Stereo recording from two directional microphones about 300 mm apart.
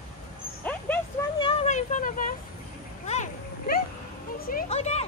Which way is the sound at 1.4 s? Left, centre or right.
Centre.